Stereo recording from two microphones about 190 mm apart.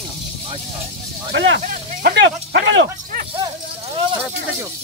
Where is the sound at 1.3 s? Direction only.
75° right (ahead or behind).